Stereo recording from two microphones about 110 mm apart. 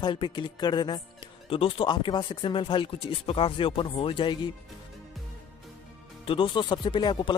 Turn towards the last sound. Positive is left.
turn(degrees=45)  # may be behind; listen again after turning